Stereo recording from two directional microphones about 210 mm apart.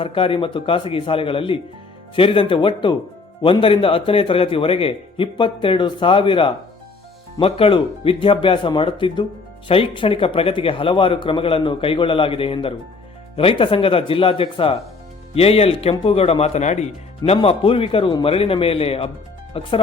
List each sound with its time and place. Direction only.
0.0 s speech: 25° left (ahead or behind)